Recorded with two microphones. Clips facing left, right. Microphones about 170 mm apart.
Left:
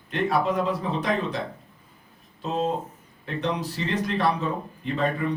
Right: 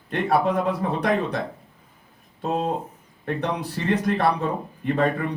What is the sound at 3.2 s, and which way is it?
A man's voice, 55° right (ahead or behind).